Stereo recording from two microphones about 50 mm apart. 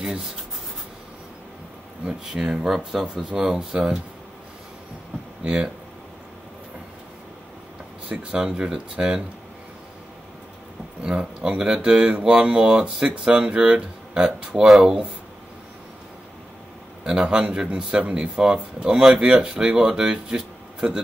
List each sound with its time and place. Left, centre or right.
2.0 s speech: centre
5.4 s speech: centre
8.1 s speech: right
11.0 s speech: centre
17.0 s speech: centre